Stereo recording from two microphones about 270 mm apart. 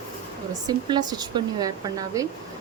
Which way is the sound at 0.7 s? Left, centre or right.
Centre.